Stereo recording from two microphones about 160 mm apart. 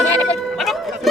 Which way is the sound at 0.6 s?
Centre (ahead or behind).